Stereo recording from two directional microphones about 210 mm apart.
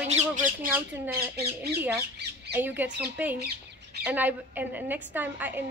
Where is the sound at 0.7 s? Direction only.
10° right (ahead or behind).